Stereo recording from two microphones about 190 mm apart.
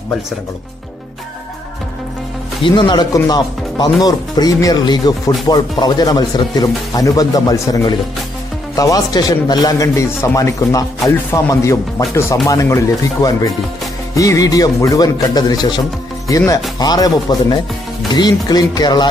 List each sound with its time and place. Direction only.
2.6 s speech: 20° left (ahead or behind)
8.7 s speech: 20° left (ahead or behind)